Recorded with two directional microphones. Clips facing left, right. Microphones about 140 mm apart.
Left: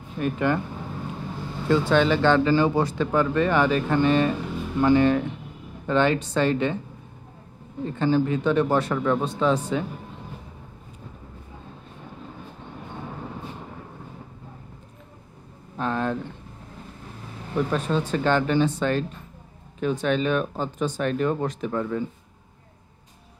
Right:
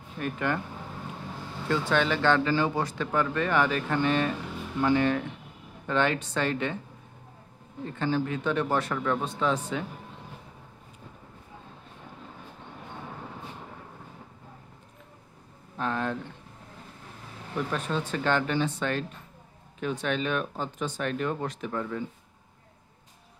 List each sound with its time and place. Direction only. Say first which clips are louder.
0.2 s speech: left 6 dB; 20° left (ahead or behind)
1.7 s speech: left 6 dB; 25° left (ahead or behind)
7.8 s speech: left 6 dB; 25° left (ahead or behind)
15.8 s speech: left 4 dB; 35° left (ahead or behind)
17.6 s speech: left 6 dB; 35° left (ahead or behind)